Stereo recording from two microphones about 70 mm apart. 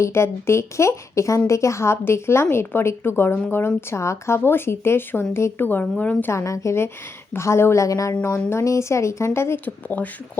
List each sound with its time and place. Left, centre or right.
0.0 s a woman's voice: left
6.3 s speech: left
9.6 s speech: left